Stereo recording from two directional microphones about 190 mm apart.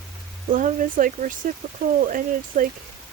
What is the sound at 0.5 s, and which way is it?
Speech, 45° right (ahead or behind).